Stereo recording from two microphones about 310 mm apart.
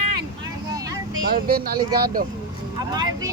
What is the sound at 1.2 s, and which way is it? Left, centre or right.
Speech, right.